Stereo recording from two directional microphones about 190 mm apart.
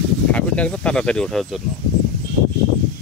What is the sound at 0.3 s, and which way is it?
Speech, 5° left (ahead or behind).